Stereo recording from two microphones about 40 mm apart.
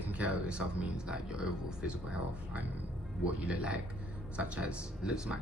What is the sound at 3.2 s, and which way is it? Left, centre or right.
Speech, right.